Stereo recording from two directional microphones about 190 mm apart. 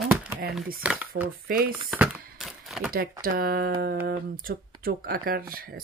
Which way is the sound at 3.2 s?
50° right (ahead or behind).